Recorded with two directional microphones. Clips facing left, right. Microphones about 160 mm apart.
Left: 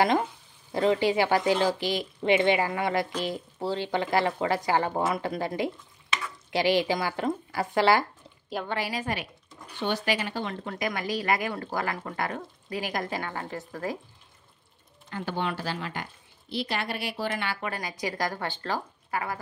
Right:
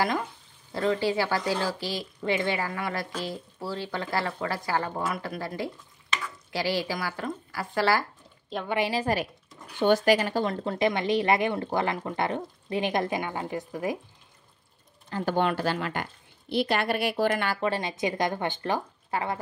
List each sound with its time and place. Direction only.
0.0 s speech: 20° left (ahead or behind)
8.6 s a woman's voice: 20° right (ahead or behind)
9.0 s a woman's voice: 40° right (ahead or behind); by 13.9 s 15° right (ahead or behind)
15.0 s speech: 35° right (ahead or behind)
15.3 s a woman's voice: 55° right (ahead or behind)
17.6 s a woman's voice: 25° right (ahead or behind)